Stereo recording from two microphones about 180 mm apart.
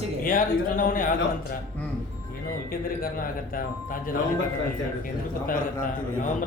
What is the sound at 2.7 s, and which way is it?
A man's voice, 55° left (ahead or behind).